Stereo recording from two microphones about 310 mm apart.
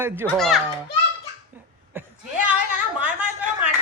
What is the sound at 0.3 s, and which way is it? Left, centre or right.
Speech, centre.